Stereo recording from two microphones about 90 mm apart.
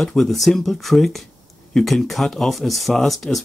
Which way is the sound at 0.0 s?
5° left (ahead or behind).